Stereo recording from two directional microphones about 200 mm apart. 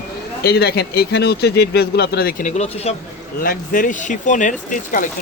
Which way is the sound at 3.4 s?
45° left (ahead or behind).